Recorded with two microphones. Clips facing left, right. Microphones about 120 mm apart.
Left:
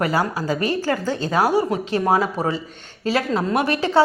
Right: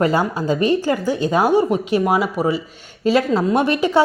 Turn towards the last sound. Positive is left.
turn(degrees=-20)  # may be behind; listen again after turning